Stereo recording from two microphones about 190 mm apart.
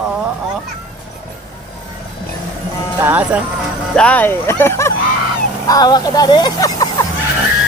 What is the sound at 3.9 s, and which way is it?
Speech, 5° left (ahead or behind).